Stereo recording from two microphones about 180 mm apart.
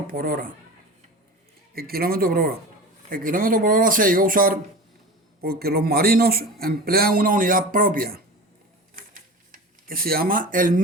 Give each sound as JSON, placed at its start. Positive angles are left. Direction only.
{"t": 0.1, "sound": "speech", "side_deg": -50}
{"t": 1.7, "sound": "a man's voice", "side_deg": -55}
{"t": 9.0, "sound": "typewriter", "side_deg": -50}
{"t": 9.8, "sound": "speech", "side_deg": -55}